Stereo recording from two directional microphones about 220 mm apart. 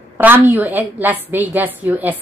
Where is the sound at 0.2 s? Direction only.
10° right (ahead or behind).